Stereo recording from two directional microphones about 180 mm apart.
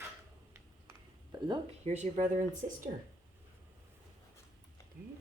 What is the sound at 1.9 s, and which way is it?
Speech, 40° right (ahead or behind).